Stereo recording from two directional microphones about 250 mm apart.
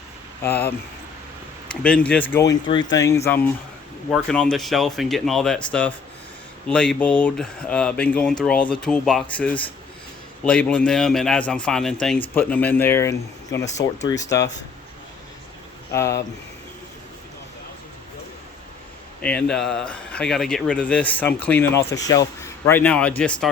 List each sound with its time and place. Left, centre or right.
0.4 s speech: centre
1.8 s speech: centre
2.6 s speech: centre
15.9 s speech: centre
19.2 s speech: centre